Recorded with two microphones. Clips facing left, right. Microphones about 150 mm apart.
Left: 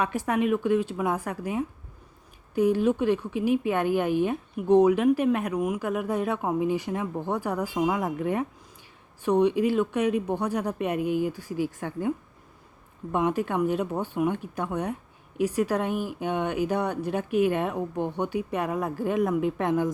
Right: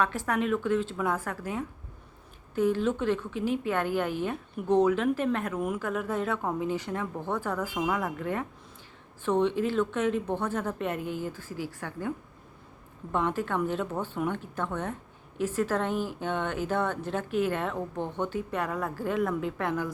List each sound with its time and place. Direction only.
0.0 s a woman's voice: 15° left (ahead or behind)